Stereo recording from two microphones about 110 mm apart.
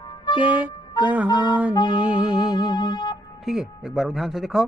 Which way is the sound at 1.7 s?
40° left (ahead or behind).